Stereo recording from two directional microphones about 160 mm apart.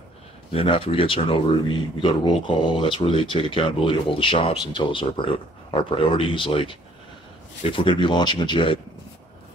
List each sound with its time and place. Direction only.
0.5 s speech: 35° left (ahead or behind)